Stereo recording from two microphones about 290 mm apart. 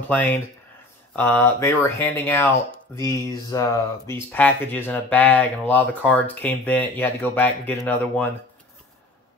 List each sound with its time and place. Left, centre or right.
0.1 s speech: centre